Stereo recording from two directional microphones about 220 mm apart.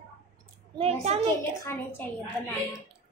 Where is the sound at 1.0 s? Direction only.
30° right (ahead or behind).